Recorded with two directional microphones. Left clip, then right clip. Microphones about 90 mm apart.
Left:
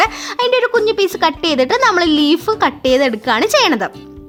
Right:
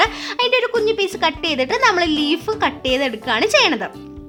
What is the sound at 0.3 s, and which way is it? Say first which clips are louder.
Speech: left 3 dB; 25° left (ahead or behind).